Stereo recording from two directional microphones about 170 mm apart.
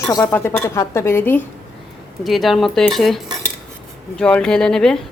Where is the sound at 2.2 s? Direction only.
Centre (ahead or behind).